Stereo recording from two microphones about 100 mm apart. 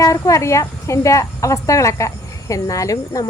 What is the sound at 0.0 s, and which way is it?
Speech, 35° left (ahead or behind).